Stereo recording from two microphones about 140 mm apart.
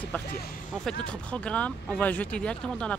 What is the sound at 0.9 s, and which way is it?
Speech, 10° left (ahead or behind).